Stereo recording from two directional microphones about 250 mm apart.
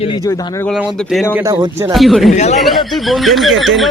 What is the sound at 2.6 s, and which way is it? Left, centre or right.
Speech, centre.